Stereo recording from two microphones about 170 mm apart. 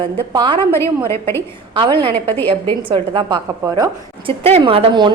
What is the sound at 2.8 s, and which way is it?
A woman's voice, 30° right (ahead or behind).